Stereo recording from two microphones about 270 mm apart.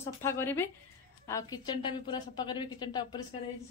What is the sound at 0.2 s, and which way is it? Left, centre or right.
A woman's voice, centre.